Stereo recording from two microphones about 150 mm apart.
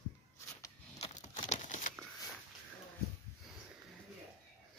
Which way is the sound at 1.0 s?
45° left (ahead or behind).